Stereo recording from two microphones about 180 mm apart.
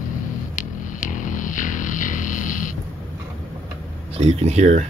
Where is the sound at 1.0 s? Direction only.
45° left (ahead or behind).